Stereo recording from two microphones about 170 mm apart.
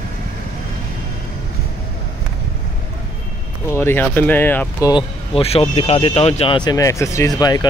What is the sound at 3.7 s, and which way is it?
Speech, 15° left (ahead or behind).